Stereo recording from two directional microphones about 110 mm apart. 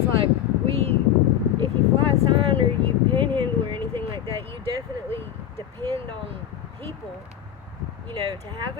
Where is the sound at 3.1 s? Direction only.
50° right (ahead or behind).